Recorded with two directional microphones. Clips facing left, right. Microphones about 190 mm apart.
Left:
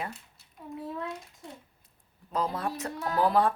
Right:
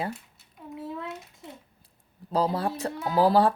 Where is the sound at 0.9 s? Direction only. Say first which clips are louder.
Even; 5° right (ahead or behind).